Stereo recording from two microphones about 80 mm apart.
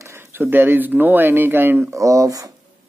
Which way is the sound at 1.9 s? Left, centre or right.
Right.